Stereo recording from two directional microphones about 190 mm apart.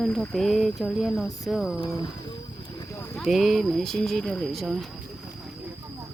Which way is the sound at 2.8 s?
15° left (ahead or behind).